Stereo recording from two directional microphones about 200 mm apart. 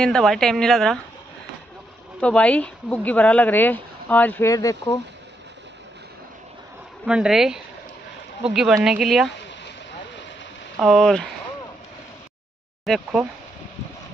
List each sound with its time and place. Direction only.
0.0 s speech: centre (ahead or behind)
2.1 s speech: 5° left (ahead or behind)
7.1 s speech: 5° right (ahead or behind)
8.8 s speech: centre (ahead or behind)
10.8 s speech: centre (ahead or behind)
12.8 s speech: centre (ahead or behind)